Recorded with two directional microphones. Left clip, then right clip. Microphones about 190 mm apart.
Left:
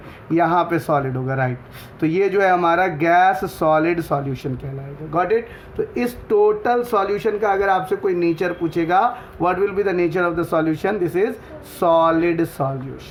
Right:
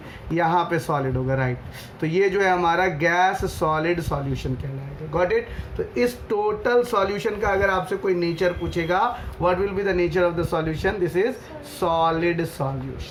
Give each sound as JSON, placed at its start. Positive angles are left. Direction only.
{"t": 0.3, "sound": "speech", "side_deg": 45}
{"t": 5.9, "sound": "speech", "side_deg": 50}